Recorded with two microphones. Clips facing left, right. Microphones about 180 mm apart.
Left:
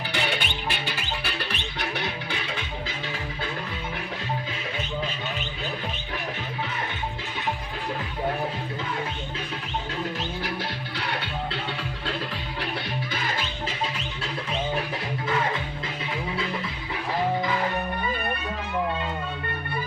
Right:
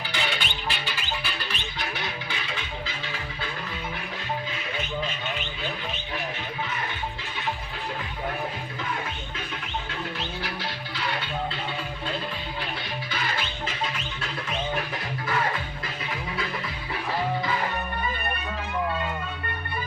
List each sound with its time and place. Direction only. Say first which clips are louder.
0.1 s music: left 3 dB; 60° left (ahead or behind)
10.2 s music: left 3 dB; 50° left (ahead or behind)
13.7 s music: left 1 dB; 30° left (ahead or behind)